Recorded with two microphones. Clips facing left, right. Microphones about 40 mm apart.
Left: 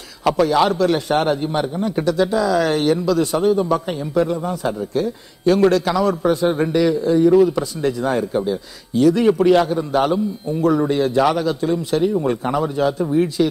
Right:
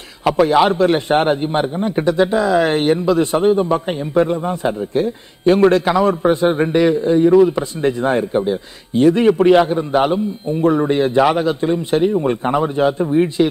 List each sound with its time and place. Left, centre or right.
0.2 s a man's voice: centre
0.5 s a man's voice: right